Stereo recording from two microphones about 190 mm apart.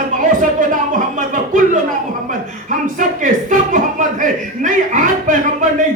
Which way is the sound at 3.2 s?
45° right (ahead or behind).